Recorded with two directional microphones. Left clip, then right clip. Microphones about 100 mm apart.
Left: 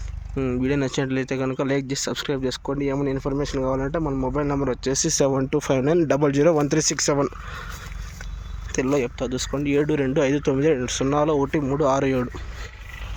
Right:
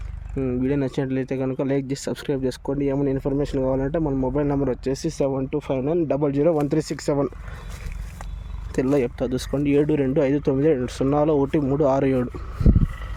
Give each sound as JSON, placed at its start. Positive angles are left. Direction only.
{"t": 0.6, "sound": "speech", "side_deg": -20}
{"t": 4.0, "sound": "speech", "side_deg": -20}
{"t": 4.4, "sound": "speech", "side_deg": -50}
{"t": 5.0, "sound": "speech", "side_deg": 10}
{"t": 5.4, "sound": "speech", "side_deg": 20}
{"t": 6.1, "sound": "speech", "side_deg": 5}
{"t": 6.7, "sound": "speech", "side_deg": -15}
{"t": 8.7, "sound": "speech", "side_deg": -55}
{"t": 9.6, "sound": "speech", "side_deg": -50}
{"t": 9.8, "sound": "speech", "side_deg": -30}